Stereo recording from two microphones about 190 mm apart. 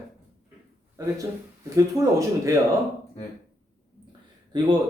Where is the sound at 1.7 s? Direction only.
15° right (ahead or behind).